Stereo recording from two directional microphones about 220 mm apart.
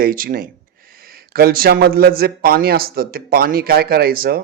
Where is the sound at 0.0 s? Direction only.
40° right (ahead or behind).